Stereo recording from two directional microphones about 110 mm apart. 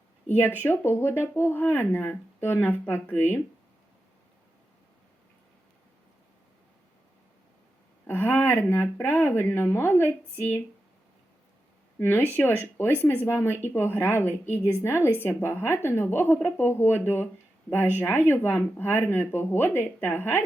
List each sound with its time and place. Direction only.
0.3 s speech: 20° left (ahead or behind)
8.0 s speech: 20° left (ahead or behind)
11.9 s speech: 15° left (ahead or behind)